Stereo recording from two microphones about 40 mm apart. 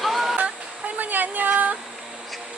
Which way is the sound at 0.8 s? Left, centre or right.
Right.